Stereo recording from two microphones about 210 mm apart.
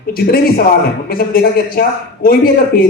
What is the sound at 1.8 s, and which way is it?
Speech, 45° left (ahead or behind).